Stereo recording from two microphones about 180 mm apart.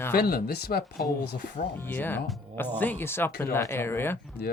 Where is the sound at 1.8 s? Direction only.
10° left (ahead or behind).